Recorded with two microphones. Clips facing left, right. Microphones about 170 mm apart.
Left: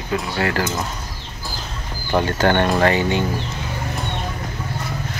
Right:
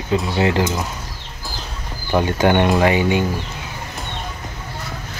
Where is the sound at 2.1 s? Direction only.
15° right (ahead or behind).